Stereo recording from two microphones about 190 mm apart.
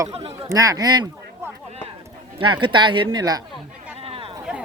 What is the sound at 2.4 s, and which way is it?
Speech, 25° right (ahead or behind).